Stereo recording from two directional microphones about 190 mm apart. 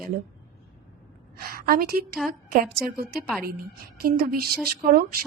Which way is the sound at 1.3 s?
50° right (ahead or behind).